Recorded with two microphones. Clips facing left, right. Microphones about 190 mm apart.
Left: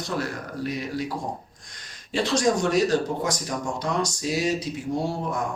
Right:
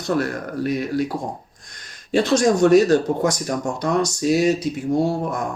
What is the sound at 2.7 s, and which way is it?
Speech, 50° right (ahead or behind).